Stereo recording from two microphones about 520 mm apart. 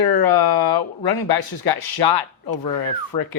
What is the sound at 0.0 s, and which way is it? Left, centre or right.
Speech, left.